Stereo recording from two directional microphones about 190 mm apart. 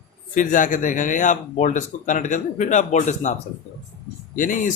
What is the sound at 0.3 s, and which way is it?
Speech, 45° left (ahead or behind).